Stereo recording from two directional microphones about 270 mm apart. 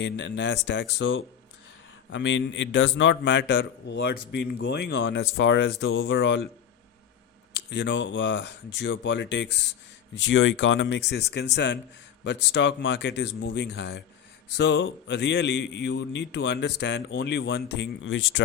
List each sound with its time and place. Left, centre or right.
0.0 s a man's voice: left
7.5 s a man's voice: left